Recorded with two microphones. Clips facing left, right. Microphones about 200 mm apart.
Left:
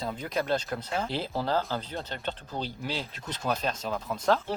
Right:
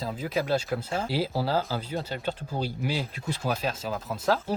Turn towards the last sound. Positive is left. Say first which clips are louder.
# even
turn(degrees=-5)  # may be behind; listen again after turning